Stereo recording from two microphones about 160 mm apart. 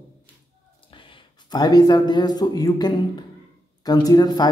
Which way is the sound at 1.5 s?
25° left (ahead or behind).